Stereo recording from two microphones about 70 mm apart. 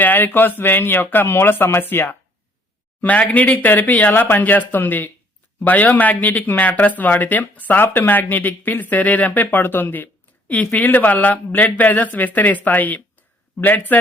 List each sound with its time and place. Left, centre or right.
0.0 s speech: left